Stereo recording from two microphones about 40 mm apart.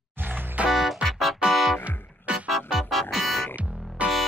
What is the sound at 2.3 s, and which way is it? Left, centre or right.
Music, right.